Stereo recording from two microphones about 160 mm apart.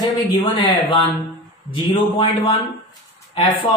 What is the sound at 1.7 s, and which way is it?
A man's voice, 30° left (ahead or behind).